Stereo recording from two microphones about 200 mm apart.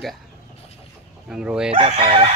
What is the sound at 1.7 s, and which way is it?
Speech, 30° right (ahead or behind).